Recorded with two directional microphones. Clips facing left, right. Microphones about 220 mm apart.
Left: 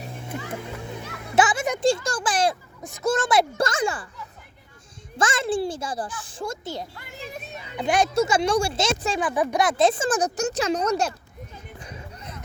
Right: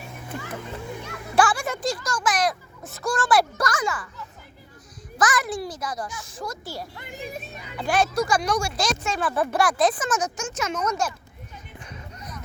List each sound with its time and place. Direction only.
1.4 s speech: 20° left (ahead or behind)
1.8 s speech: 30° left (ahead or behind)
5.1 s speech: 25° left (ahead or behind)
6.9 s a sound: 20° right (ahead or behind)
7.8 s speech: 20° left (ahead or behind)
9.3 s speech: 15° left (ahead or behind); by 11.1 s 30° left (ahead or behind)
11.5 s music: 30° left (ahead or behind)